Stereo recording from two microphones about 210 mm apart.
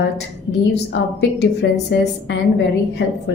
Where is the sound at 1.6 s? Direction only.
50° left (ahead or behind).